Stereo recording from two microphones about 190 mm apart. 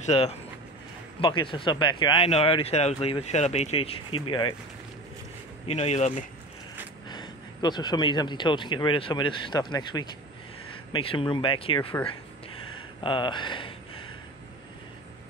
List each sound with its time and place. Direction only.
0.0 s speech: 35° left (ahead or behind)
5.7 s speech: 35° left (ahead or behind)
7.1 s speech: 20° left (ahead or behind)
13.0 s speech: 25° left (ahead or behind)